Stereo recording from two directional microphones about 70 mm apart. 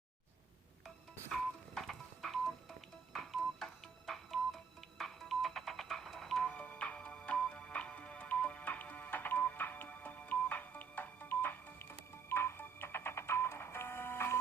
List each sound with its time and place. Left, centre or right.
1.3 s music: centre; by 14.3 s left